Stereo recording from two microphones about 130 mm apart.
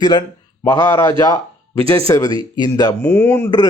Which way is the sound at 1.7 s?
45° right (ahead or behind).